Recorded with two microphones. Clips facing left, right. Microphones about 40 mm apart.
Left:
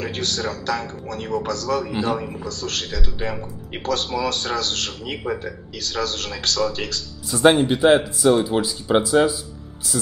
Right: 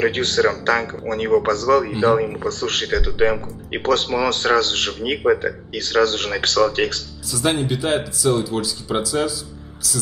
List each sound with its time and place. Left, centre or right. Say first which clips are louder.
0.0 s speech: right 8 dB; right
7.2 s speech: left 5 dB; left